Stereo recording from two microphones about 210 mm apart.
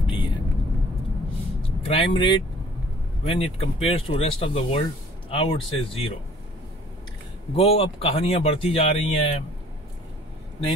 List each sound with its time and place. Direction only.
0.0 s vehicle: 25° left (ahead or behind)
1.9 s speech: 25° left (ahead or behind)
7.5 s speech: 30° left (ahead or behind)